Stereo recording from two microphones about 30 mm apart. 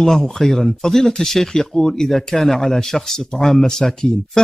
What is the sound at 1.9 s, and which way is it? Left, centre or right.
Speech, centre.